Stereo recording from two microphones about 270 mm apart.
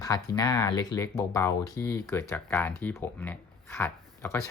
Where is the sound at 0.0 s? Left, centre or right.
Centre.